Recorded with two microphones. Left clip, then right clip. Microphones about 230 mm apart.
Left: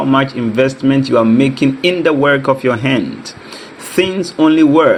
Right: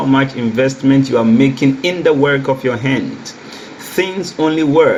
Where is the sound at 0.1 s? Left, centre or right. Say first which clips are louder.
Left 1 dB; left.